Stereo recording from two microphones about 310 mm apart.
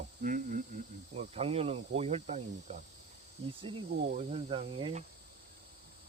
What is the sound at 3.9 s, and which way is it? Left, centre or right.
Speech, right.